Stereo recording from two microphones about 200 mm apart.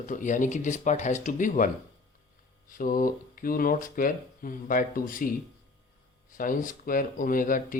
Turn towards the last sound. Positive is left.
turn(degrees=45)  # may be behind; listen again after turning